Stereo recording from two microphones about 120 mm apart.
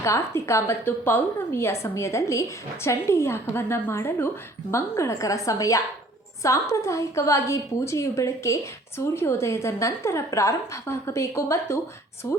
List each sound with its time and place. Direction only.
0.0 s a woman's voice: 25° left (ahead or behind)